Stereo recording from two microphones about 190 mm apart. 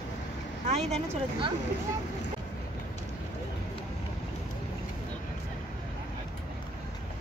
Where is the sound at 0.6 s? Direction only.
35° right (ahead or behind).